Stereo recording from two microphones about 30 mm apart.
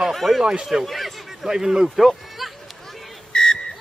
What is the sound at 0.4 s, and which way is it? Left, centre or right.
Speech, right.